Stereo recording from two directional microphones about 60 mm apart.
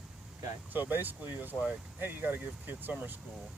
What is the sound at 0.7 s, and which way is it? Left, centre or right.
Speech, right.